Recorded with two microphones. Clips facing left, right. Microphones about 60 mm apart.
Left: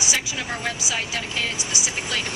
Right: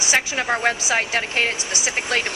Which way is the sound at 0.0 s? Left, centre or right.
Right.